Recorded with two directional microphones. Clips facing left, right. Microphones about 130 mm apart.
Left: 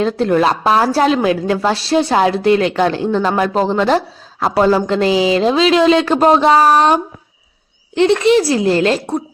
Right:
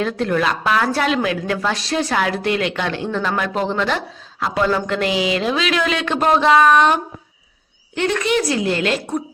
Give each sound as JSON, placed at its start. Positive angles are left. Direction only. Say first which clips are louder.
{"t": 0.0, "sound": "a woman's voice", "louder": "left 5 dB", "side_deg": 30}